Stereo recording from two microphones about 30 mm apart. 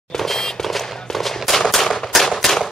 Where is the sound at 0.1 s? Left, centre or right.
Centre.